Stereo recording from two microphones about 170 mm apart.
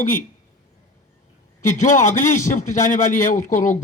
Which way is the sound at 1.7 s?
45° left (ahead or behind).